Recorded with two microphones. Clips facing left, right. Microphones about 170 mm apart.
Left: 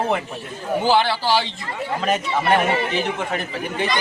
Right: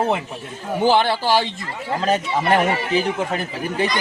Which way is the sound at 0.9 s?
50° right (ahead or behind).